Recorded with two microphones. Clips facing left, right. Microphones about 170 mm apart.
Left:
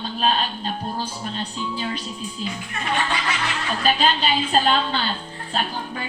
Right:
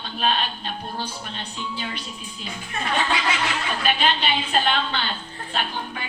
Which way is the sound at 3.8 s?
35° left (ahead or behind).